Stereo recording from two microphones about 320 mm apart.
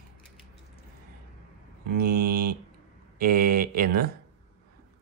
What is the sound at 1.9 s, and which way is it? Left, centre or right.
Speech, right.